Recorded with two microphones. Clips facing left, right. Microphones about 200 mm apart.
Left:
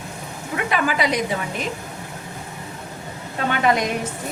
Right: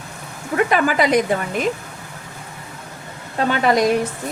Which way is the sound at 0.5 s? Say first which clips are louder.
Right 5 dB; 45° right (ahead or behind).